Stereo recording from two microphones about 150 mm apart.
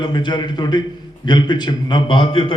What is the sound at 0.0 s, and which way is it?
A man's voice, 30° left (ahead or behind).